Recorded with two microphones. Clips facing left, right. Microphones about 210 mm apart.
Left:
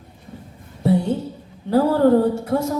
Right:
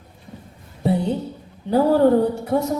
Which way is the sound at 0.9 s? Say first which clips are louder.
Left 2 dB; 20° right (ahead or behind).